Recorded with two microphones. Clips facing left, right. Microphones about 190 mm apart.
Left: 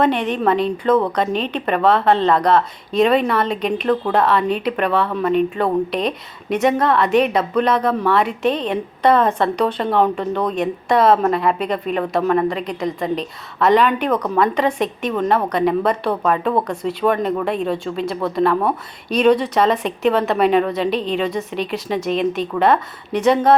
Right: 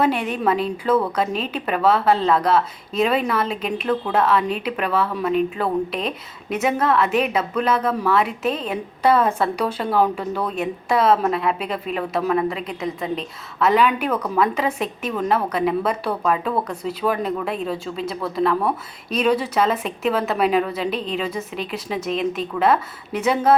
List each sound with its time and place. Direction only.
0.0 s a woman's voice: 5° right (ahead or behind)